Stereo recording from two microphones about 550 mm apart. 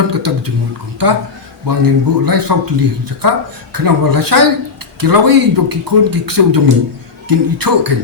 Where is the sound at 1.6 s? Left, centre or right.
Right.